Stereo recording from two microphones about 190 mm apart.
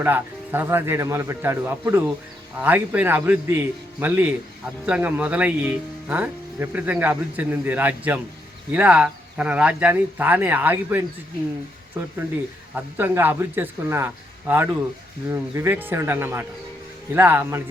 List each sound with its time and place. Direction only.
0.0 s speech: 10° right (ahead or behind)
12.7 s speech: 10° right (ahead or behind)